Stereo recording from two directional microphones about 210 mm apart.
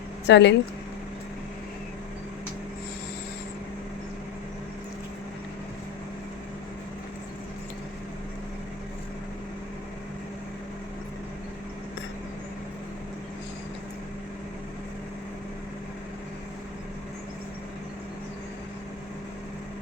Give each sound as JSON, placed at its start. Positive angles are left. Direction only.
{"t": 0.3, "sound": "speech", "side_deg": 55}